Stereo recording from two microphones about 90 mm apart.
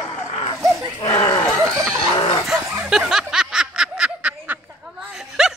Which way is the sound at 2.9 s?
5° right (ahead or behind).